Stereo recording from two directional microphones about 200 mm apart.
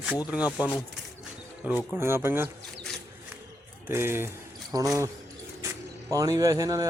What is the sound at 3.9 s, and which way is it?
A man's voice, 10° right (ahead or behind).